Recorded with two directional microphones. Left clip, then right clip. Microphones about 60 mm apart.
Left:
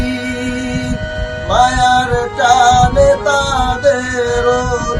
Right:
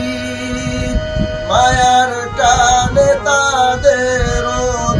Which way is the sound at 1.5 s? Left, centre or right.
Centre.